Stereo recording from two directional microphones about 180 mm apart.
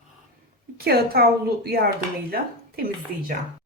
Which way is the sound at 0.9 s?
60° right (ahead or behind).